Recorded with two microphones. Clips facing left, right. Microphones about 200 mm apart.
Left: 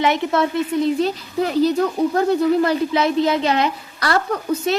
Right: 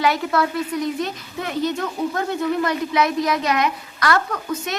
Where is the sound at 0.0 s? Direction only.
20° left (ahead or behind).